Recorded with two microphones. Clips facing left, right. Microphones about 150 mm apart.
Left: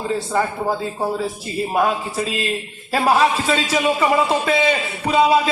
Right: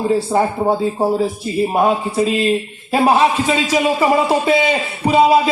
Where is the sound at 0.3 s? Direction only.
30° right (ahead or behind).